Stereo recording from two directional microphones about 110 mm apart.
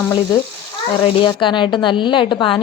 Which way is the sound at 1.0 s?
50° left (ahead or behind).